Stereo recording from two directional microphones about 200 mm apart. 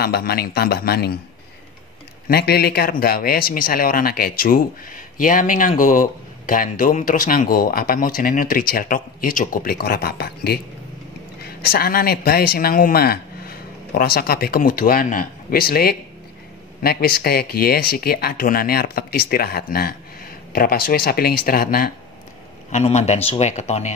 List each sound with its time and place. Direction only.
0.0 s speech: 50° left (ahead or behind)
2.2 s a man's voice: 50° left (ahead or behind)
22.7 s speech: 35° left (ahead or behind)